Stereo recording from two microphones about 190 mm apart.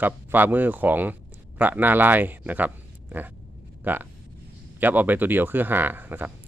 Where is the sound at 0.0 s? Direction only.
10° right (ahead or behind).